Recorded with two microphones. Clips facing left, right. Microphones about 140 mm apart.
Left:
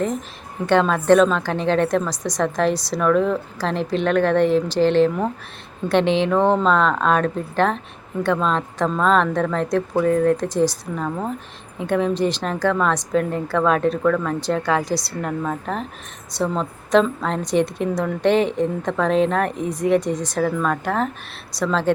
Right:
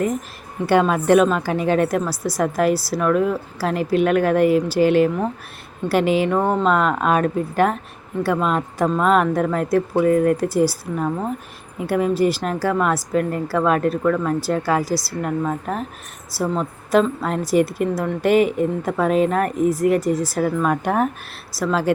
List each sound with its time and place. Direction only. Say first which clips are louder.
0.7 s a woman's voice: even; 10° right (ahead or behind)